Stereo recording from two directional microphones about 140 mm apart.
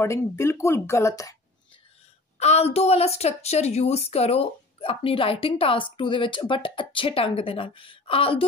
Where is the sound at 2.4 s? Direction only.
50° left (ahead or behind).